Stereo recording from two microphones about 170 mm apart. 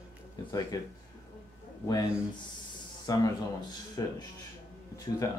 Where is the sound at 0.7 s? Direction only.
20° left (ahead or behind).